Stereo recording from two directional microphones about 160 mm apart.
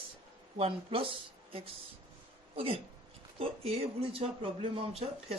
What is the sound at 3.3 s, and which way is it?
Speech, 40° right (ahead or behind).